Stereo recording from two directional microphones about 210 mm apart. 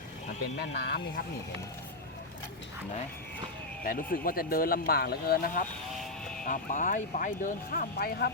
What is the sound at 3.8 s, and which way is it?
Speech, 45° left (ahead or behind).